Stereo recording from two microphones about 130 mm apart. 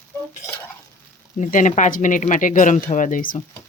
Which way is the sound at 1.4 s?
80° left.